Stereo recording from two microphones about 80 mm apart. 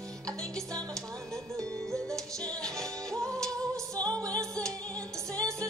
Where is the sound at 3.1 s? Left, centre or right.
Right.